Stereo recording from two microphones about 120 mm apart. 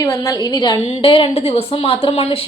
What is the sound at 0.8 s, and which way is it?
Speech, 55° left (ahead or behind).